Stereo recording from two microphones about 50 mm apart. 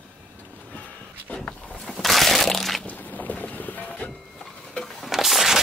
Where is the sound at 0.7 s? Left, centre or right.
Left.